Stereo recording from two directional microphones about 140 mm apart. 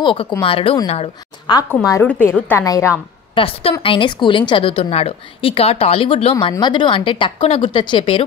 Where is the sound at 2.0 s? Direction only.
10° left (ahead or behind).